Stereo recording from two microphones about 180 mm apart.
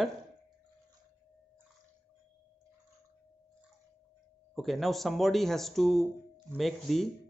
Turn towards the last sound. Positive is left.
turn(degrees=0)  # may be behind; listen again after turning